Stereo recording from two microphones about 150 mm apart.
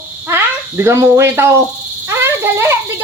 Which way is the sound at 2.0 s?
15° right (ahead or behind).